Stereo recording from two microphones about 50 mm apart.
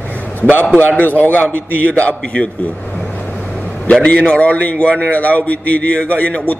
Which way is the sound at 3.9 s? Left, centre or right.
Left.